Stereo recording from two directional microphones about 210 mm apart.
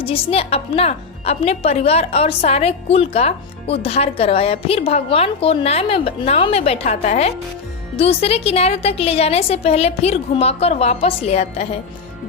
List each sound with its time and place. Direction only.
0.0 s a woman's voice: 25° left (ahead or behind)